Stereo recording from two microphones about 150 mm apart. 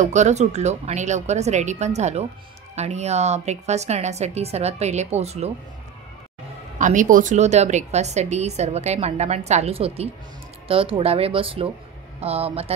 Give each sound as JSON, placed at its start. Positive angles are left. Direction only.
{"t": 0.0, "sound": "a woman's voice", "side_deg": -50}
{"t": 6.8, "sound": "a woman's voice", "side_deg": -60}